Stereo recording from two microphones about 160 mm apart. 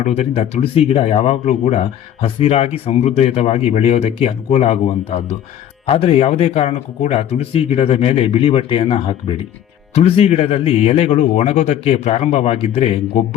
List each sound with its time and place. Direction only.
0.0 s speech: 40° left (ahead or behind)